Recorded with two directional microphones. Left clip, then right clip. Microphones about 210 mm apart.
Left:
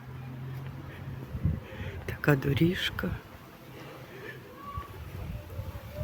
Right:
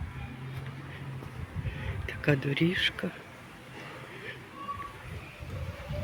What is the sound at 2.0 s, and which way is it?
Speech, 20° left (ahead or behind).